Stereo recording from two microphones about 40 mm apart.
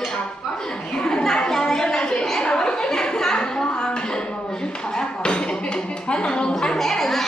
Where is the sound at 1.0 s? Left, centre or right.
Centre.